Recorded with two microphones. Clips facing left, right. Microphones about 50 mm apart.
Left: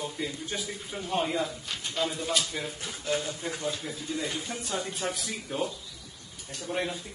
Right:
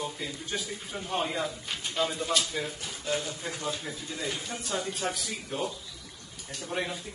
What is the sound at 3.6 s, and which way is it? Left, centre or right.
Speech, right.